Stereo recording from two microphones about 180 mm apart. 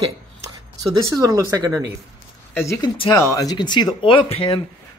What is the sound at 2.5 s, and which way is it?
Speech, 15° left (ahead or behind).